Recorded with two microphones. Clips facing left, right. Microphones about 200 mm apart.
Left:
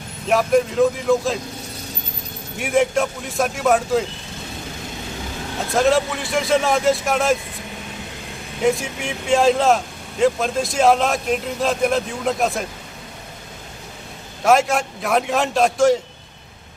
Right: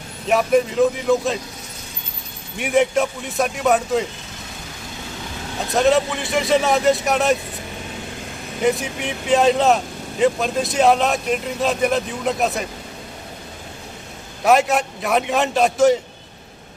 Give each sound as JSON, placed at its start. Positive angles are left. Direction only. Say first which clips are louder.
{"t": 0.3, "sound": "speech", "louder": "even", "side_deg": 0}
{"t": 2.6, "sound": "speech", "louder": "right 1 dB", "side_deg": 0}
{"t": 5.7, "sound": "speech", "louder": "right 1 dB", "side_deg": 0}
{"t": 8.6, "sound": "speech", "louder": "even", "side_deg": 0}
{"t": 14.4, "sound": "speech", "louder": "even", "side_deg": 0}